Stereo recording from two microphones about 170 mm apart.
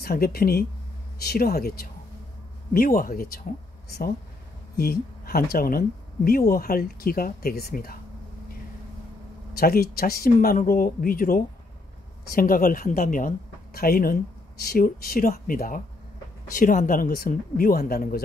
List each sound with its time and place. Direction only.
0.0 s speech: 60° left (ahead or behind)
4.7 s speech: 60° left (ahead or behind)
9.6 s speech: 60° left (ahead or behind)